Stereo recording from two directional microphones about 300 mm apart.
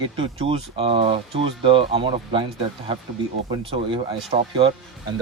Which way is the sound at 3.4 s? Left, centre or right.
Centre.